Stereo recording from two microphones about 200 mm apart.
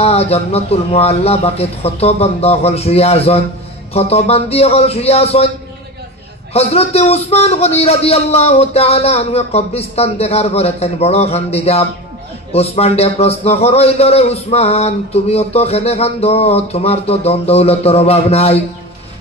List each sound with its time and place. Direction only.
0.0 s a man's voice: 30° left (ahead or behind)
6.5 s a man's voice: 30° left (ahead or behind)